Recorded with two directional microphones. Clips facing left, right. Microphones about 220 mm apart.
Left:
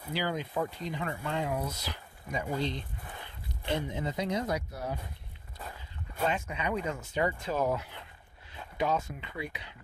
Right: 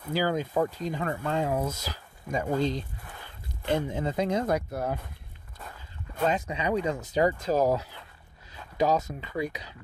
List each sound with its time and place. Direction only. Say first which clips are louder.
0.1 s speech: right 6 dB; 45° right (ahead or behind)
6.5 s speech: right 5 dB; 35° right (ahead or behind)